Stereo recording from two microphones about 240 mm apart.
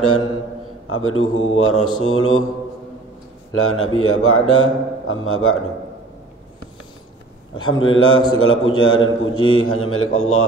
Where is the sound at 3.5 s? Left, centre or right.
Left.